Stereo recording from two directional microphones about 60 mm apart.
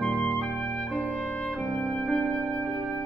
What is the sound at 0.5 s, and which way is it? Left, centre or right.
Music, centre.